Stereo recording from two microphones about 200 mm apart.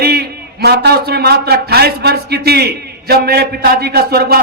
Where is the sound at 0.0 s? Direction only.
55° right (ahead or behind).